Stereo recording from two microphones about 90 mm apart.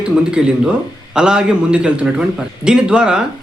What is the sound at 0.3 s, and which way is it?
Speech, 10° right (ahead or behind).